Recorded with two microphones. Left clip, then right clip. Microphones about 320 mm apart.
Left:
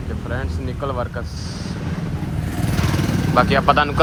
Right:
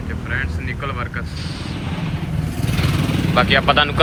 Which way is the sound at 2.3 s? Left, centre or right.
Centre.